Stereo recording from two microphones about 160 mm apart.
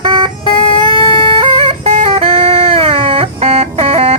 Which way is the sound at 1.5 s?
35° right (ahead or behind).